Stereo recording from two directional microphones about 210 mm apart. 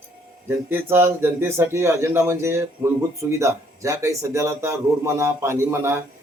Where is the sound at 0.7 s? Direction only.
10° right (ahead or behind).